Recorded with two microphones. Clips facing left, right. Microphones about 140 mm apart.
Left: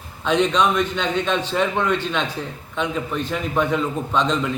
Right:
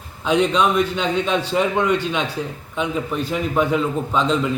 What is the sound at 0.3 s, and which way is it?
A man's voice, 10° right (ahead or behind).